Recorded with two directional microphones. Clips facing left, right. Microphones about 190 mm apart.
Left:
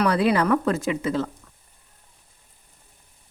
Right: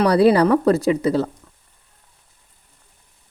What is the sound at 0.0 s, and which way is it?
Speech, 35° right (ahead or behind).